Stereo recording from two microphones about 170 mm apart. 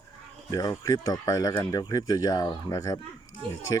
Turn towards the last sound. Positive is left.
turn(degrees=-30)  # may be behind; listen again after turning